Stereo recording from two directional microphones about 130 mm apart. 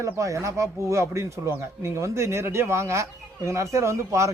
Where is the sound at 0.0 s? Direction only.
25° right (ahead or behind).